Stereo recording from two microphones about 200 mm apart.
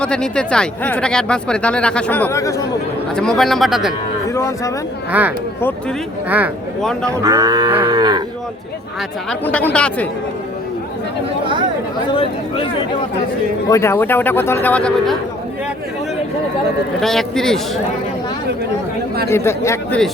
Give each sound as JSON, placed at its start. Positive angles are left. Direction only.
{"t": 0.0, "sound": "speech", "side_deg": 5}
{"t": 3.2, "sound": "speech", "side_deg": 0}
{"t": 4.3, "sound": "speech", "side_deg": 15}
{"t": 5.1, "sound": "speech", "side_deg": -5}
{"t": 7.1, "sound": "cattle", "side_deg": -15}
{"t": 9.4, "sound": "a man's voice", "side_deg": 10}
{"t": 12.1, "sound": "speech", "side_deg": 25}
{"t": 13.7, "sound": "a man's voice", "side_deg": 15}
{"t": 17.0, "sound": "speech", "side_deg": 0}
{"t": 19.3, "sound": "a man's voice", "side_deg": 15}